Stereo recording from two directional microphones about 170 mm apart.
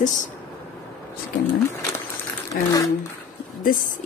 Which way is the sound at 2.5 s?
60° left (ahead or behind).